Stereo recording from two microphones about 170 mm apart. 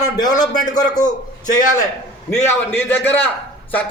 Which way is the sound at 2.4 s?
10° left (ahead or behind).